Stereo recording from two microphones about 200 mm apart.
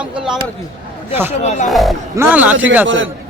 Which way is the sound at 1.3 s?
35° left (ahead or behind).